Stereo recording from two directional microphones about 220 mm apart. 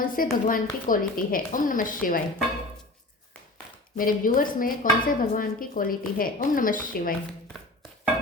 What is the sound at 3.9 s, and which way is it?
Dishes, 40° left (ahead or behind).